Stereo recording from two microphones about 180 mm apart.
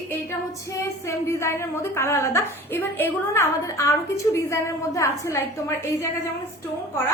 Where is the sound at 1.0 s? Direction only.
15° left (ahead or behind).